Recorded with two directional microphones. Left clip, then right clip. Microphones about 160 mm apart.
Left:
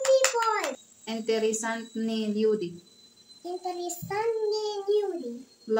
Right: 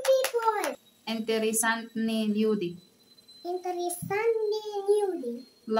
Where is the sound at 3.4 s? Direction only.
20° right (ahead or behind).